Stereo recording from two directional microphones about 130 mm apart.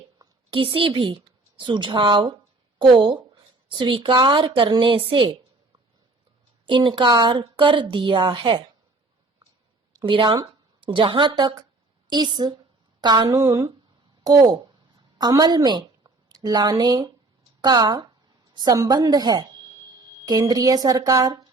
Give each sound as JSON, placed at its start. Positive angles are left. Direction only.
{"t": 0.2, "sound": "a woman's voice", "side_deg": -40}
{"t": 6.7, "sound": "a woman's voice", "side_deg": -35}
{"t": 9.9, "sound": "a woman's voice", "side_deg": -35}